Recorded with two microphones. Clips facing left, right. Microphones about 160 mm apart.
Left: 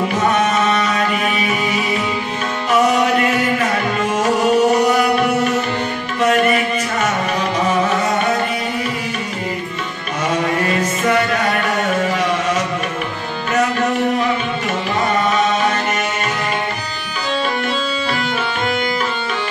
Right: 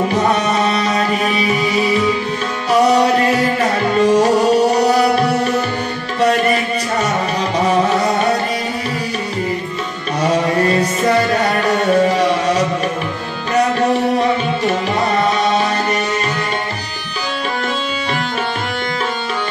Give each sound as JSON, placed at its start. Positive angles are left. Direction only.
{"t": 0.1, "sound": "music", "side_deg": -35}
{"t": 2.7, "sound": "music", "side_deg": -35}
{"t": 6.2, "sound": "a sound", "side_deg": -35}
{"t": 7.9, "sound": "music", "side_deg": -35}
{"t": 10.6, "sound": "music", "side_deg": -35}
{"t": 15.1, "sound": "tabla", "side_deg": -35}